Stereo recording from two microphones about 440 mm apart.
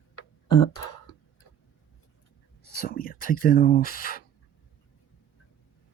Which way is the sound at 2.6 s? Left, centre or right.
Centre.